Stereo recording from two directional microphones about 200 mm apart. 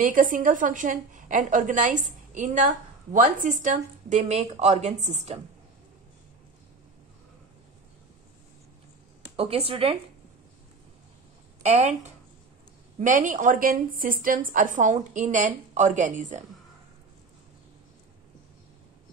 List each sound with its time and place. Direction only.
0.0 s a woman's voice: 40° right (ahead or behind)
9.4 s speech: 30° right (ahead or behind)
11.6 s a woman's voice: 35° right (ahead or behind)